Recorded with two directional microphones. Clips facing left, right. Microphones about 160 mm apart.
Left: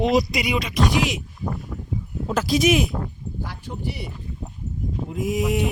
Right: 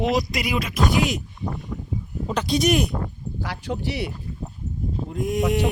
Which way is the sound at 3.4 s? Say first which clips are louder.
Right 5 dB; 90° right.